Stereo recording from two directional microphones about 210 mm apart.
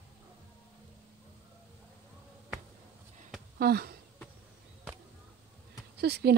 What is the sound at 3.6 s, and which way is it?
Speech, 50° right (ahead or behind).